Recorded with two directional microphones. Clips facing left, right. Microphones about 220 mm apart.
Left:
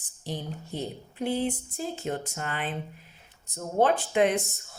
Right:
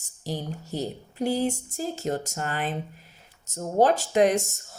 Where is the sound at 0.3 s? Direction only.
40° right (ahead or behind).